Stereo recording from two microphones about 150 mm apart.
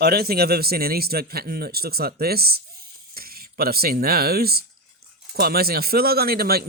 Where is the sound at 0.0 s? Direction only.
90° right.